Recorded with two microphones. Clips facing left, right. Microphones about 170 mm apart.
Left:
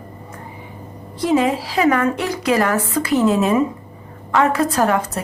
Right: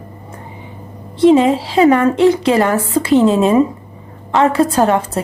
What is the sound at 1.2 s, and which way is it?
A woman's voice, 25° right (ahead or behind).